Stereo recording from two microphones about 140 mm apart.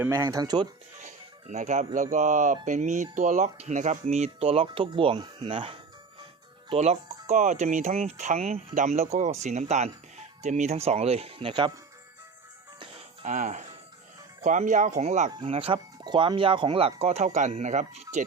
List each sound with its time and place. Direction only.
0.0 s speech: 20° right (ahead or behind)
1.0 s speech: 60° right (ahead or behind); by 5.8 s 40° right (ahead or behind)
6.7 s speech: 50° right (ahead or behind)
8.7 s speech: 60° right (ahead or behind); by 11.7 s 40° right (ahead or behind)
12.8 s music: 45° right (ahead or behind)
13.2 s speech: 65° right (ahead or behind)
15.4 s speech: 40° right (ahead or behind)